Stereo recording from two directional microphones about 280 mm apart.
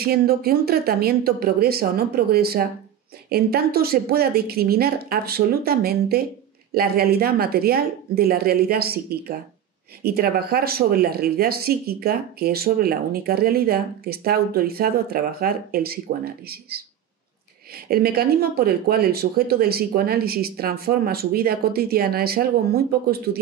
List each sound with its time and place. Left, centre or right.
0.0 s speech: right
17.8 s speech: right